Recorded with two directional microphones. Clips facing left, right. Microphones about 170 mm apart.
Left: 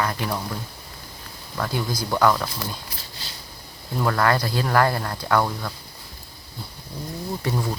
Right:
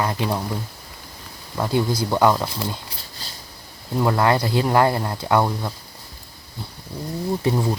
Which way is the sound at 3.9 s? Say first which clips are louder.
Right 3 dB; 20° right (ahead or behind).